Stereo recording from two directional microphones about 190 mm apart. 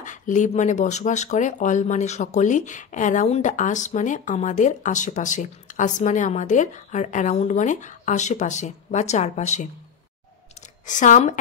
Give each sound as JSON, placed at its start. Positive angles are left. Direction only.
{"t": 0.0, "sound": "speech", "side_deg": 40}
{"t": 10.9, "sound": "speech", "side_deg": 40}